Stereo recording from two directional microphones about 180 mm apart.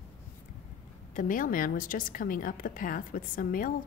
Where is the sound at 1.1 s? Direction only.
45° left (ahead or behind).